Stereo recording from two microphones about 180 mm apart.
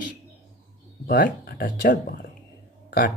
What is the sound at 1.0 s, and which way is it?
Speech, 60° left (ahead or behind).